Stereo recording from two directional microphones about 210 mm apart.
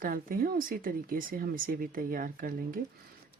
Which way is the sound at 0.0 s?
40° right (ahead or behind).